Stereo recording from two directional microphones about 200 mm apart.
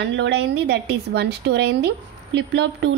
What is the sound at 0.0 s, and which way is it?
A woman's voice, 60° right (ahead or behind).